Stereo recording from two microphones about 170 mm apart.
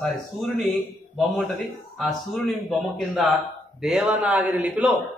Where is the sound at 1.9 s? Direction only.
Centre (ahead or behind).